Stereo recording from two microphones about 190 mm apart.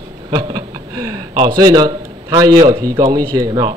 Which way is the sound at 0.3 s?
20° right (ahead or behind).